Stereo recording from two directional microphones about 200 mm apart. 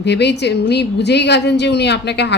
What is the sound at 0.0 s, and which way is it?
Speech, 60° left (ahead or behind).